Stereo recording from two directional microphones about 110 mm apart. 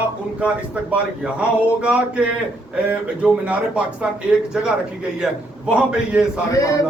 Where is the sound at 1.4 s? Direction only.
10° right (ahead or behind).